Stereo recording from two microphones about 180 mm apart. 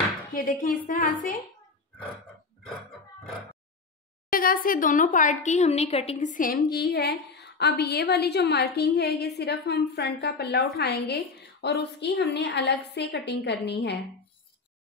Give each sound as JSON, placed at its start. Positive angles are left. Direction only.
{"t": 0.3, "sound": "a woman's voice", "side_deg": 50}
{"t": 4.3, "sound": "a woman's voice", "side_deg": 55}